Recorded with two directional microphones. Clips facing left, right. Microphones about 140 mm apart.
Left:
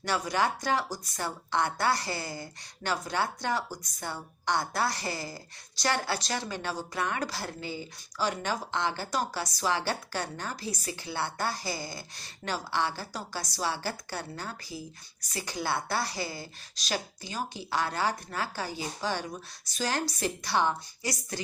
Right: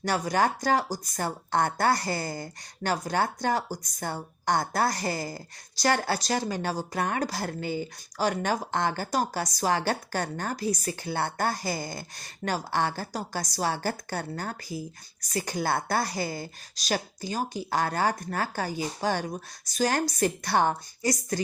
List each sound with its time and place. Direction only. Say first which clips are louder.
0.0 s a woman's voice: right 3 dB; 45° right (ahead or behind)